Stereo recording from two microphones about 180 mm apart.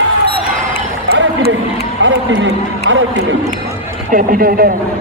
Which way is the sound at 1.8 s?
90° right.